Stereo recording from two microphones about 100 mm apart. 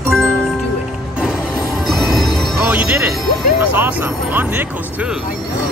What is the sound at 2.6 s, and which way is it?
Music, 20° right (ahead or behind).